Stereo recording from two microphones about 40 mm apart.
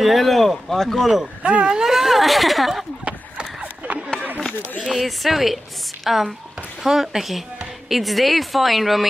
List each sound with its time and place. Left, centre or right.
0.0 s a woman's voice: centre
1.0 s speech: centre
1.4 s speech: right
1.7 s speech: centre
3.6 s chatter: right
4.7 s a woman's voice: centre